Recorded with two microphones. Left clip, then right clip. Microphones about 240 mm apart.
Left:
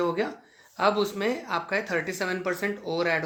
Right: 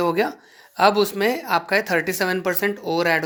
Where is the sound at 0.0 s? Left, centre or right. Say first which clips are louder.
Right 6 dB; right.